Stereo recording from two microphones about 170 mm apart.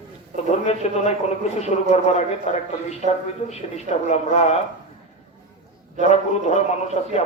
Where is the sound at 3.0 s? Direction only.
45° right (ahead or behind).